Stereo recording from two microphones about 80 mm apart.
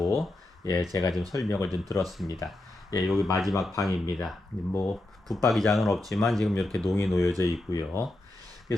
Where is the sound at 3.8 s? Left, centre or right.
Left.